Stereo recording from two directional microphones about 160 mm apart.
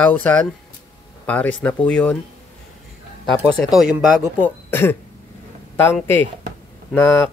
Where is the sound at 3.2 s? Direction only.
Centre (ahead or behind).